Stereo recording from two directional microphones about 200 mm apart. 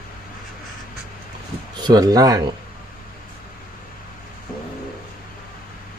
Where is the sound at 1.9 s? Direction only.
20° right (ahead or behind).